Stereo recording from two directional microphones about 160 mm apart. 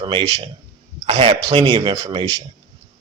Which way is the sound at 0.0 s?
30° right (ahead or behind).